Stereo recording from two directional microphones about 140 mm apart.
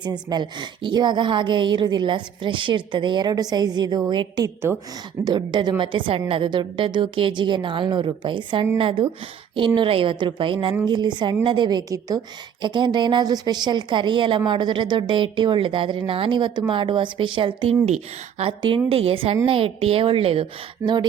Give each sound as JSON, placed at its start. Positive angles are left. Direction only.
{"t": 0.0, "sound": "speech", "side_deg": -30}
{"t": 17.8, "sound": "a woman's voice", "side_deg": -50}